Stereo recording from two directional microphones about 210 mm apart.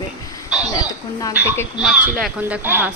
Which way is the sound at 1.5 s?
15° left (ahead or behind).